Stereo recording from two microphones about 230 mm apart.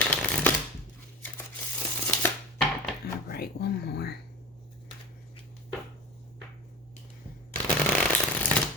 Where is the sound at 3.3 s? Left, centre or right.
Left.